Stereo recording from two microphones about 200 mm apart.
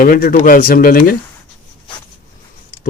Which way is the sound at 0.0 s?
45° left (ahead or behind).